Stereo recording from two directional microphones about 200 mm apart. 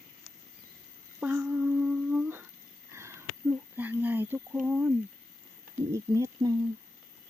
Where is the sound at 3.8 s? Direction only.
10° right (ahead or behind).